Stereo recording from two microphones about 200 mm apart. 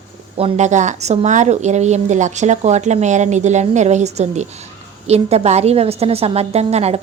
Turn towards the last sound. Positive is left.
turn(degrees=-30)  # may be behind; listen again after turning